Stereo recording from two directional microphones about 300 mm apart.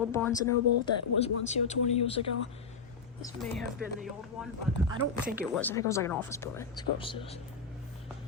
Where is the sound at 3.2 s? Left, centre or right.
Centre.